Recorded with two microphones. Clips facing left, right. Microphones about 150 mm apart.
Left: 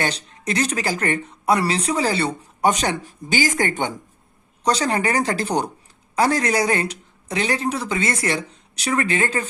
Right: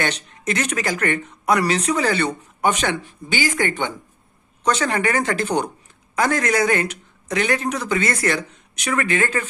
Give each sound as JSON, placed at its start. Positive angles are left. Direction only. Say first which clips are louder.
{"t": 0.0, "sound": "speech", "louder": "right 1 dB", "side_deg": 30}